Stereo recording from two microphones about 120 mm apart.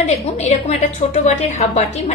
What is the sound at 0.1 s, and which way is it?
A woman's voice, 65° left (ahead or behind).